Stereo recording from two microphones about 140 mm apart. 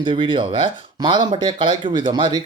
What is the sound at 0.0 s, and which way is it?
Speech, 35° right (ahead or behind).